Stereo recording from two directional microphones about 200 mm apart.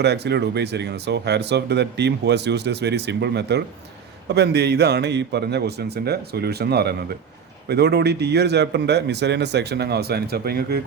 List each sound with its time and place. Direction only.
0.0 s speech: 55° right (ahead or behind)